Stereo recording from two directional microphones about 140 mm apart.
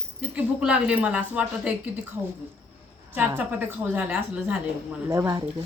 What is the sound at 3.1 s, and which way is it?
Speech, 10° right (ahead or behind).